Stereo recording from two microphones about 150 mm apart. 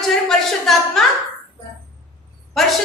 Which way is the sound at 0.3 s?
5° left (ahead or behind).